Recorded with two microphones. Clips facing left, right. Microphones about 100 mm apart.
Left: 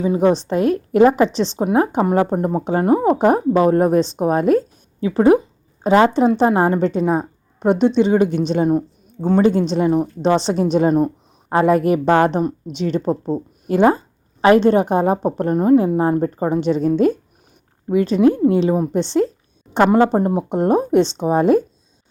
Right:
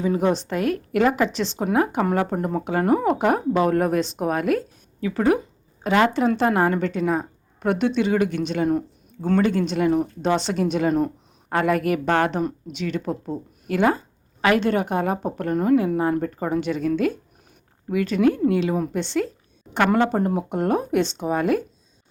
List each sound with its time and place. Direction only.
0.0 s speech: 20° left (ahead or behind)